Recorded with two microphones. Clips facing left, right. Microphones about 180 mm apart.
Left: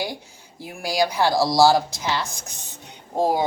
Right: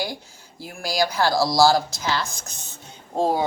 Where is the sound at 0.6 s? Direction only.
15° left (ahead or behind).